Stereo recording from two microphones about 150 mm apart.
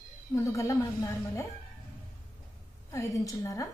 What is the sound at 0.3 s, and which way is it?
A woman's voice, 20° left (ahead or behind).